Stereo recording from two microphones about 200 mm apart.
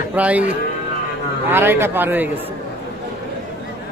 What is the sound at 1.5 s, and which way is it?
Speech, 10° right (ahead or behind).